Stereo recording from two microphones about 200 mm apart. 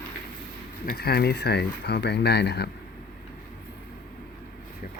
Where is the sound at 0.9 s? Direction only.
50° left (ahead or behind).